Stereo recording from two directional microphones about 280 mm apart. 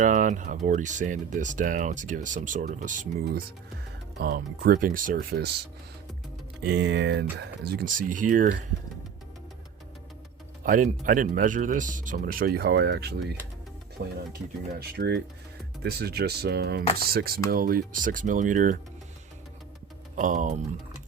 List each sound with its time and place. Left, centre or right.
0.0 s speech: right
6.7 s speech: right
10.6 s a man's voice: right
20.1 s speech: right